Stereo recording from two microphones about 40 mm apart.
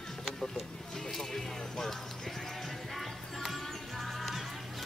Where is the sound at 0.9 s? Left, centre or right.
Centre.